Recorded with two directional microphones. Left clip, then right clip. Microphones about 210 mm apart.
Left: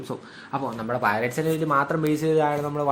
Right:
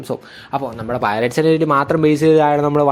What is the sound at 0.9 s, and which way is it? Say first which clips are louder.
Speech: right 6 dB; 35° right (ahead or behind).